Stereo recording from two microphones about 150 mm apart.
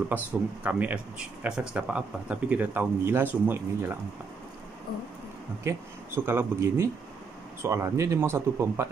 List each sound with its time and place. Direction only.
0.1 s speech: 10° right (ahead or behind)
5.6 s speech: 15° right (ahead or behind)